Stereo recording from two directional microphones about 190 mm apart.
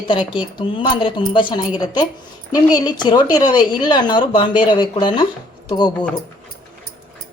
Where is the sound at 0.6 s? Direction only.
25° left (ahead or behind).